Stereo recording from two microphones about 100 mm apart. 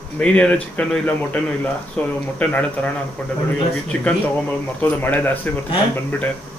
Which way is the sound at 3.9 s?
15° left (ahead or behind).